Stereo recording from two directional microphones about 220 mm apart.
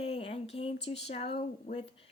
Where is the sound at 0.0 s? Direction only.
25° left (ahead or behind).